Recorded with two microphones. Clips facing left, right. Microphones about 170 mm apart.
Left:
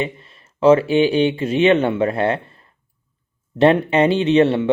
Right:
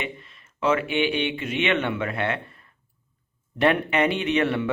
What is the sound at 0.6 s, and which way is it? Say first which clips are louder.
Speech: left 10 dB; 30° left (ahead or behind).